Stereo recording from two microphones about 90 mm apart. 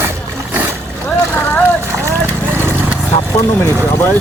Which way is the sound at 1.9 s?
30° right (ahead or behind).